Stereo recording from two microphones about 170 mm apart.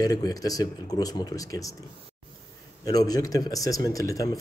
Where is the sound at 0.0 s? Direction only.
20° left (ahead or behind).